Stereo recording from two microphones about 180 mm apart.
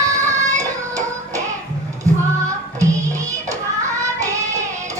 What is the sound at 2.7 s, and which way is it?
Music, 15° right (ahead or behind).